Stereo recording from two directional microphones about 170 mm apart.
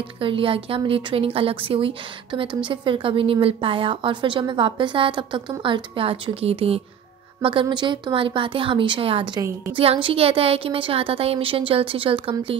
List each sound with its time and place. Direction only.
0.2 s a woman's voice: 30° right (ahead or behind)